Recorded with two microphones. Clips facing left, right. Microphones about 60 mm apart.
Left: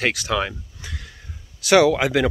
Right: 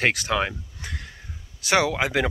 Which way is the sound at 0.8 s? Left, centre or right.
Right.